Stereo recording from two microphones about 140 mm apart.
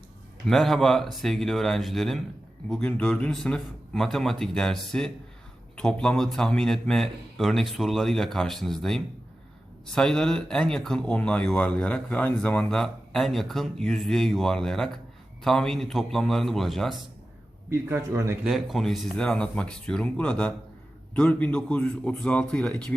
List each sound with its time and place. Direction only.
0.4 s speech: centre (ahead or behind)
17.7 s a man's voice: 20° right (ahead or behind)
18.4 s speech: centre (ahead or behind)